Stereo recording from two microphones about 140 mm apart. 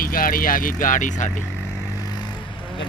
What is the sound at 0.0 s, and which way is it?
Speech, 90° left.